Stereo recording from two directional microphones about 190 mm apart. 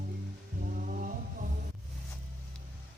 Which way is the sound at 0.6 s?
45° right (ahead or behind).